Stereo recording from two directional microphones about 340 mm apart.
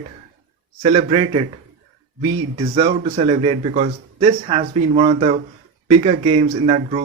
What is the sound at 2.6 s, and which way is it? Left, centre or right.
Speech, centre.